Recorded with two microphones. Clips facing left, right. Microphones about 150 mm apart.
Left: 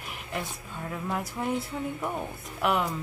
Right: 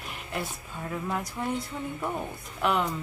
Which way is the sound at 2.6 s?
Centre (ahead or behind).